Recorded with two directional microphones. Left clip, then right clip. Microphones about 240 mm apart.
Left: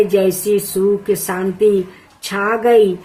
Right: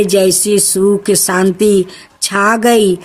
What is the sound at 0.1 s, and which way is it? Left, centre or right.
Speech, right.